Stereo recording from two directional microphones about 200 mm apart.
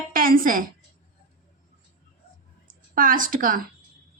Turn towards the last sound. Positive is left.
turn(degrees=-45)  # may be behind; listen again after turning